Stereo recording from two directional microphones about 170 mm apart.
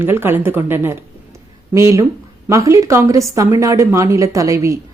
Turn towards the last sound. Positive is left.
turn(degrees=-20)  # may be behind; listen again after turning